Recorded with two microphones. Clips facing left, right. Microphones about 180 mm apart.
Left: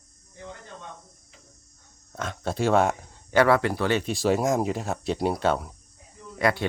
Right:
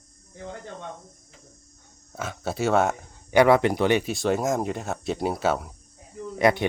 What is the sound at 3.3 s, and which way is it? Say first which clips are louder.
Speech: right 3 dB; 15° right (ahead or behind).